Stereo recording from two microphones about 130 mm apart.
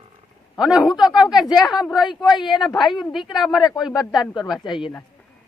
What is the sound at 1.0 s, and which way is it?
Speech, 30° left (ahead or behind).